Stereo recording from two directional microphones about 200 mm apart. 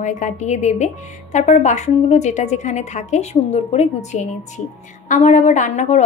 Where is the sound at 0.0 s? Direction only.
40° left (ahead or behind).